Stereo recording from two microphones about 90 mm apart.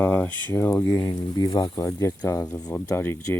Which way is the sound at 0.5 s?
30° left (ahead or behind).